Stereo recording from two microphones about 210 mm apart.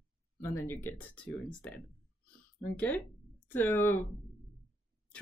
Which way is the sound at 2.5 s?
10° left (ahead or behind).